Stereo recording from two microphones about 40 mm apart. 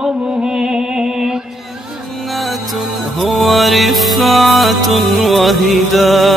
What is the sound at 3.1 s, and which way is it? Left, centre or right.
Music, centre.